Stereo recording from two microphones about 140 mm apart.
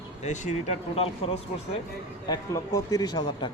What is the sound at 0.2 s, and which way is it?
Speech, 60° left (ahead or behind).